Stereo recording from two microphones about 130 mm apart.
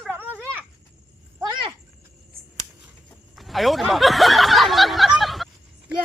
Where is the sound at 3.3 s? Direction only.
Centre (ahead or behind).